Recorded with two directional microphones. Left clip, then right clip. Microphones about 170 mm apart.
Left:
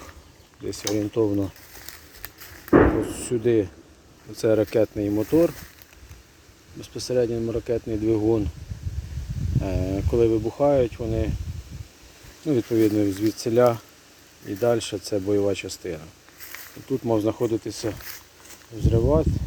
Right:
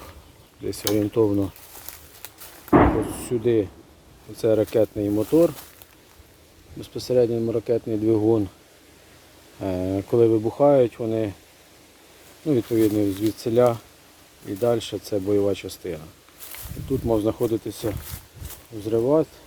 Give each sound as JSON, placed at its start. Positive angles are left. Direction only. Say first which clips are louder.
{"t": 0.6, "sound": "speech", "louder": "right 3 dB", "side_deg": -15}
{"t": 3.1, "sound": "speech", "louder": "even", "side_deg": 0}
{"t": 6.8, "sound": "speech", "louder": "right 3 dB", "side_deg": -10}
{"t": 9.6, "sound": "speech", "louder": "right 2 dB", "side_deg": -5}
{"t": 12.5, "sound": "speech", "louder": "even", "side_deg": 0}
{"t": 17.1, "sound": "speech", "louder": "right 1 dB", "side_deg": 0}